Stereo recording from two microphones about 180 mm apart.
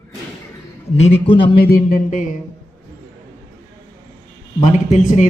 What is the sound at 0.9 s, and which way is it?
Speech, 35° left (ahead or behind).